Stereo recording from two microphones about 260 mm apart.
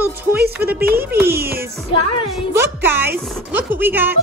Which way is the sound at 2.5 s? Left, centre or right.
Centre.